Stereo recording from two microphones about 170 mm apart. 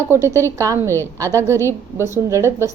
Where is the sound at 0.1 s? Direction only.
15° right (ahead or behind).